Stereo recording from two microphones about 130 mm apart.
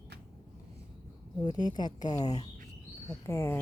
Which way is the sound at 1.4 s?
30° left (ahead or behind).